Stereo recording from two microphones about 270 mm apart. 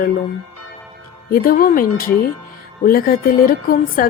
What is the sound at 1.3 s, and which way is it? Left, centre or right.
A woman's voice, left.